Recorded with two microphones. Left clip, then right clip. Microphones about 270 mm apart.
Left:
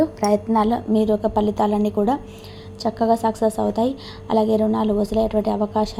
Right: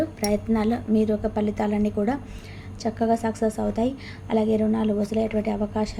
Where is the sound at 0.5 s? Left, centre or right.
Centre.